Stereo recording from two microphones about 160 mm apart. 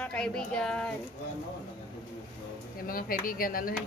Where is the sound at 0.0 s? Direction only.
5° left (ahead or behind).